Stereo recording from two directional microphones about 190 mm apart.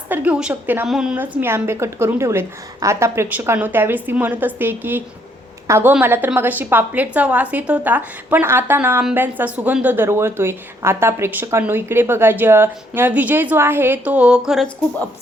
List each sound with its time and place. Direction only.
0.1 s a woman's voice: 5° right (ahead or behind)